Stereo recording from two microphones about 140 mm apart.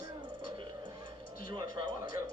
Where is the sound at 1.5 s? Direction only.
30° right (ahead or behind).